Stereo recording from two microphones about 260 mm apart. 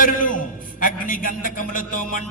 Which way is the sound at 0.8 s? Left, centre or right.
Left.